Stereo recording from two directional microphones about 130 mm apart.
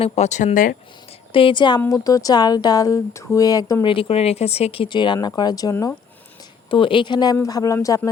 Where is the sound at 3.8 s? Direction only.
45° left (ahead or behind); by 5.9 s 25° left (ahead or behind).